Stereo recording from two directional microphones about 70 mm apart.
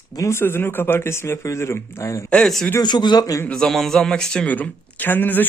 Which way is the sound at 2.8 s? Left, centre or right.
Left.